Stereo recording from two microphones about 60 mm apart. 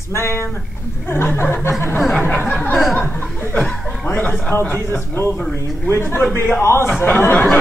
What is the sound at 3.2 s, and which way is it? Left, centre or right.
Speech, left.